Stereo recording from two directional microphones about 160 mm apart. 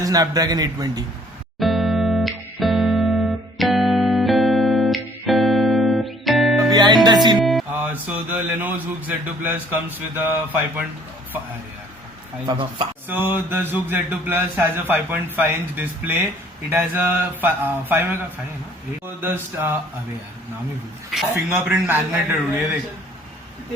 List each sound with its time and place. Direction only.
0.0 s a man's voice: 25° right (ahead or behind)
1.5 s music: centre (ahead or behind)
6.7 s music: 25° right (ahead or behind)
7.7 s speech: 10° right (ahead or behind)
12.5 s speech: 30° right (ahead or behind)
13.1 s speech: 10° right (ahead or behind)
21.5 s speech: 10° right (ahead or behind)